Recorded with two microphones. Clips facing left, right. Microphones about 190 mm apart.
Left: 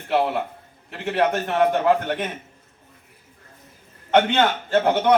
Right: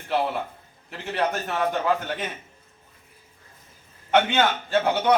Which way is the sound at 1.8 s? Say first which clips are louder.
Left 5 dB; 60° left (ahead or behind).